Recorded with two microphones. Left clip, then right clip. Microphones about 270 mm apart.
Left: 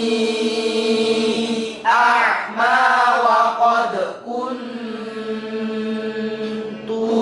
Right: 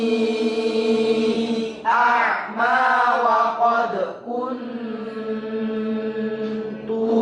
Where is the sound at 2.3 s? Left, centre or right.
Centre.